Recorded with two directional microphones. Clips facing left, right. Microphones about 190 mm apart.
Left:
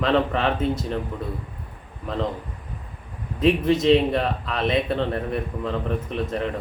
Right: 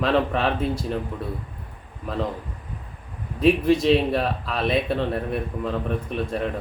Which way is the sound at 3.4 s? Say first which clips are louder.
Right 1 dB; 5° right (ahead or behind).